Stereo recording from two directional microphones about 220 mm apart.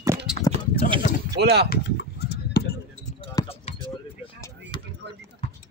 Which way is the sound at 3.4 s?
25° left (ahead or behind).